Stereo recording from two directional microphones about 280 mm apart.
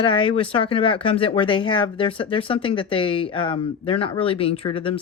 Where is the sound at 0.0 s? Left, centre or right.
Centre.